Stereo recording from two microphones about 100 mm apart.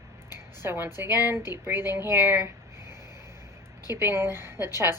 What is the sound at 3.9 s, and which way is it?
Speech, 25° right (ahead or behind).